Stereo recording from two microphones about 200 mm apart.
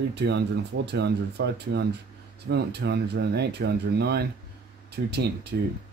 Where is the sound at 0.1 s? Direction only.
60° right (ahead or behind).